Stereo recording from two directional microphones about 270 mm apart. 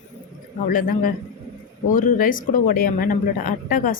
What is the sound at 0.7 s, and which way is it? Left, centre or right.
A woman's voice, left.